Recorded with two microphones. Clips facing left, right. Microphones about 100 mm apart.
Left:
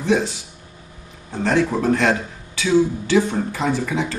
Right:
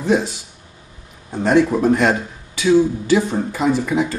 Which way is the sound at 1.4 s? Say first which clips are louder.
Right 4 dB; 15° right (ahead or behind).